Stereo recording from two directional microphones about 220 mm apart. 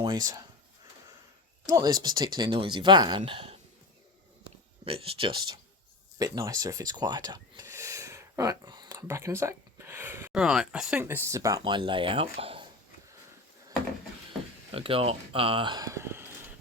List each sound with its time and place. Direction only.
0.0 s speech: 20° right (ahead or behind)
1.6 s speech: 15° right (ahead or behind)
4.9 s speech: 25° right (ahead or behind)
14.7 s speech: 25° right (ahead or behind)